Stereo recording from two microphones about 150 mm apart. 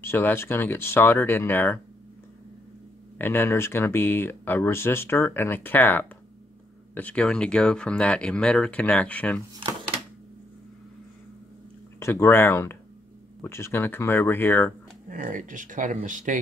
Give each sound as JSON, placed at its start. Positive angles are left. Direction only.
{"t": 0.0, "sound": "speech", "side_deg": 15}
{"t": 3.2, "sound": "speech", "side_deg": 15}
{"t": 12.0, "sound": "speech", "side_deg": 15}
{"t": 15.0, "sound": "speech", "side_deg": -65}